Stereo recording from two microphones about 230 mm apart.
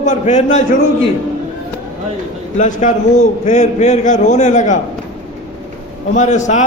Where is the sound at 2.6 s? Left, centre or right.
Left.